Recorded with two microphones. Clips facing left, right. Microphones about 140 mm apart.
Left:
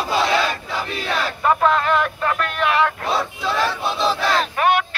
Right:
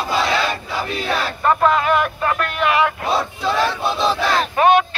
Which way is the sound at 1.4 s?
Centre (ahead or behind).